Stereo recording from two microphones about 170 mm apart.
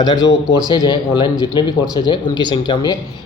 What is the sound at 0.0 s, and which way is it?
Speech, 25° left (ahead or behind).